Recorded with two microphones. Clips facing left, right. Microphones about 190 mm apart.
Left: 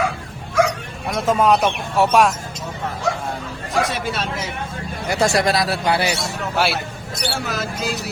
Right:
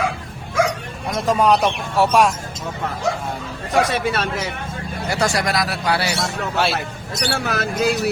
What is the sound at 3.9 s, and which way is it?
Speech, 65° right (ahead or behind).